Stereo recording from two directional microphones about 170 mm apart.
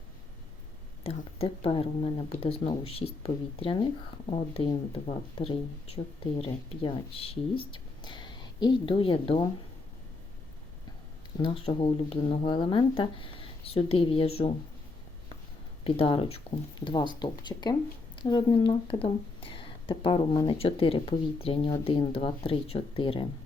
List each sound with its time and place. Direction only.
1.0 s speech: 35° left (ahead or behind)
11.4 s speech: 35° left (ahead or behind)
15.8 s speech: 30° left (ahead or behind)